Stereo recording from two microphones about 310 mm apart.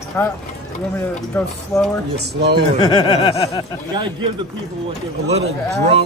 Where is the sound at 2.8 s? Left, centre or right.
Centre.